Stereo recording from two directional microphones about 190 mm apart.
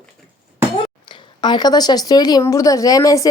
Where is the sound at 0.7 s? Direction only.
25° left (ahead or behind).